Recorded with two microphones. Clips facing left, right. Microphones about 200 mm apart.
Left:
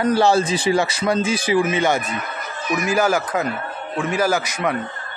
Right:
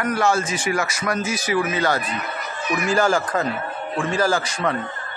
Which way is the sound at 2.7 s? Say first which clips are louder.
Left 1 dB; 10° left (ahead or behind).